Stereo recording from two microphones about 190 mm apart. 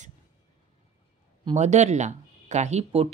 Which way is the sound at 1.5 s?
35° right (ahead or behind).